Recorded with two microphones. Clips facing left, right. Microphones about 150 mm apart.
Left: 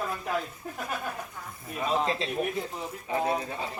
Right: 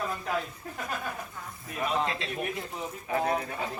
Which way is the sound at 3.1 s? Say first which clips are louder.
Even; 20° left (ahead or behind).